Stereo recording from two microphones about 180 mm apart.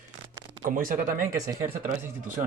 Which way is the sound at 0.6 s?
50° right (ahead or behind).